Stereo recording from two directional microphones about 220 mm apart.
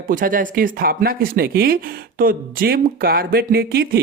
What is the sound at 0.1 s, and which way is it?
Speech, 40° right (ahead or behind).